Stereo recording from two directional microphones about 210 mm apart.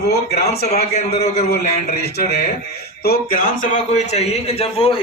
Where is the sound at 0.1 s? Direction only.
50° left (ahead or behind).